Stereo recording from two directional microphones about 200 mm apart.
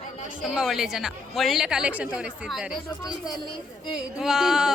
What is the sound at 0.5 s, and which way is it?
A woman's voice, 5° right (ahead or behind).